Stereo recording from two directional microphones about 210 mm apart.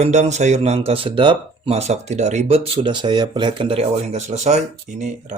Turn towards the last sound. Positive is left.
turn(degrees=-35)  # may be behind; listen again after turning